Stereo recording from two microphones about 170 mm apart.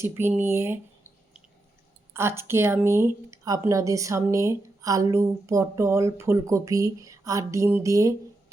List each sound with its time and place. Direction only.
0.0 s speech: 15° right (ahead or behind)